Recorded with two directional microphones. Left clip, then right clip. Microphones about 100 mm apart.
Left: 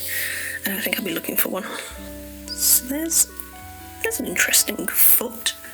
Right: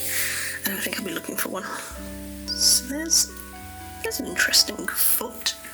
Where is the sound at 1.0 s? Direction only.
50° left (ahead or behind).